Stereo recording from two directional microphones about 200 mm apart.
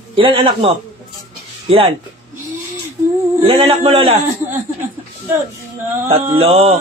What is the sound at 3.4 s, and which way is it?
Speech, 30° right (ahead or behind).